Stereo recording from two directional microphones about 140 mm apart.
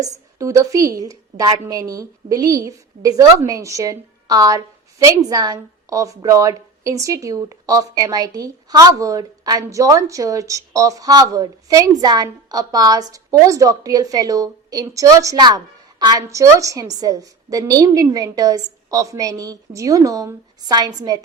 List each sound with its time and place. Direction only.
0.0 s a woman's voice: 25° right (ahead or behind)